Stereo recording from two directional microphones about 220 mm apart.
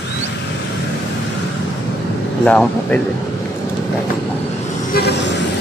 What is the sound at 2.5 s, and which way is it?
Speech, 5° left (ahead or behind).